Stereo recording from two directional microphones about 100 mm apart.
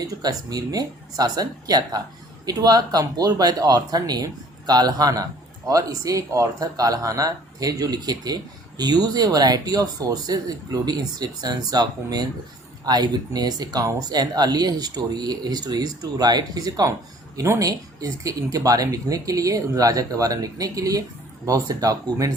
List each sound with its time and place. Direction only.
0.2 s speech: 40° right (ahead or behind)